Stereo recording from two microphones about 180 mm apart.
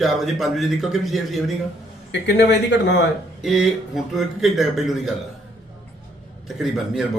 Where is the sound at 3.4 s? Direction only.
Centre (ahead or behind).